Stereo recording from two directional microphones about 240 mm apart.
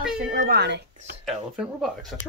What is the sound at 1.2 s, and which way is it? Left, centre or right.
Speech, centre.